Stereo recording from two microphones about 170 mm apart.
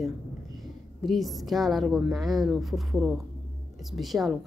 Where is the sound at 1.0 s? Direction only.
Centre (ahead or behind).